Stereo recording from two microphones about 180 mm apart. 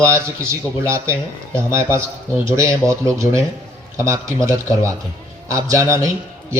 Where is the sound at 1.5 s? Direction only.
15° right (ahead or behind).